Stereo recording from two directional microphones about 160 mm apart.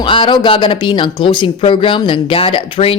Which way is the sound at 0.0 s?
30° left (ahead or behind).